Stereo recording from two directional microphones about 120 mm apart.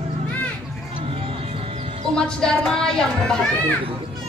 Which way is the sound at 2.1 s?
5° left (ahead or behind).